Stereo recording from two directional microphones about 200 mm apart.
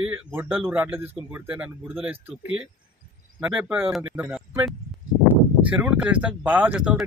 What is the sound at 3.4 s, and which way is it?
Speech, 5° right (ahead or behind).